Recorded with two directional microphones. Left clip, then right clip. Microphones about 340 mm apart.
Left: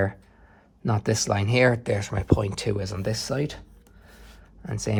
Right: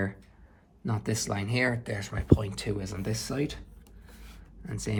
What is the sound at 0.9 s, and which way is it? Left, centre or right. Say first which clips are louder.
Speech: left 8 dB; left.